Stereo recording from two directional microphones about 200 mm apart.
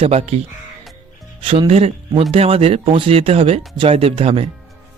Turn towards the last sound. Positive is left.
turn(degrees=-30)  # may be behind; listen again after turning